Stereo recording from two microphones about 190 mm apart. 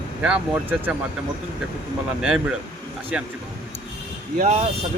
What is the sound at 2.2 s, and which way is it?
Speech, 5° right (ahead or behind).